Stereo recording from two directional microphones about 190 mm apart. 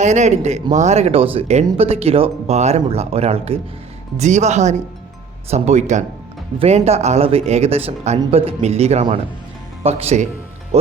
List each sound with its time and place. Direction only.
0.0 s speech: 40° right (ahead or behind)